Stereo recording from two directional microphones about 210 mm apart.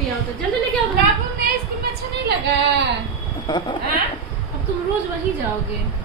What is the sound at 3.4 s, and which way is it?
Speech, 20° left (ahead or behind).